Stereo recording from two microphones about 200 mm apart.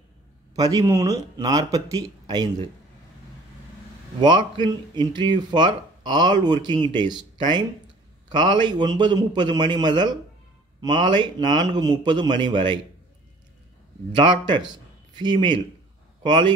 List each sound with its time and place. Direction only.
0.6 s speech: 15° right (ahead or behind)
4.2 s speech: 20° right (ahead or behind)
14.1 s speech: 25° right (ahead or behind)
14.7 s a sound: 20° right (ahead or behind)
16.2 s speech: 25° right (ahead or behind)